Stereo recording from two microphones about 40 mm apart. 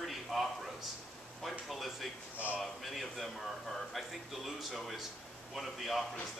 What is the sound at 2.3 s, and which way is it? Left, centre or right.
Speech, right.